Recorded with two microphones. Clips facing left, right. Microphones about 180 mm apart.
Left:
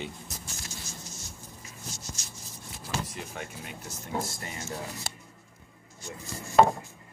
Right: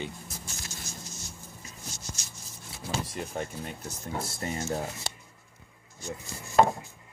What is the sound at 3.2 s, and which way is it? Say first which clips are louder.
Speech: right 5 dB; 40° right (ahead or behind).